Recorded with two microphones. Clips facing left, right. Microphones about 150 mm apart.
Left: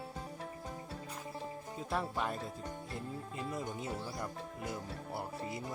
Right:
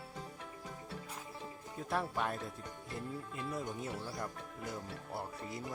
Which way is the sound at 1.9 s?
Centre (ahead or behind).